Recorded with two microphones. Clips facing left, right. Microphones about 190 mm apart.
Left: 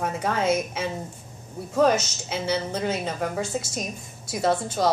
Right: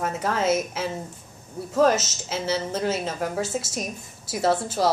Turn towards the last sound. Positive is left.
turn(degrees=-5)  # may be behind; listen again after turning